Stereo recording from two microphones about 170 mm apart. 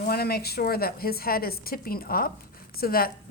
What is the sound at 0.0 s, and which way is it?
A woman's voice, 65° left (ahead or behind).